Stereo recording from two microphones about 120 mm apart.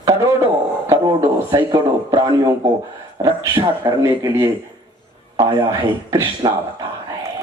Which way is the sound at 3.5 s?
40° right (ahead or behind).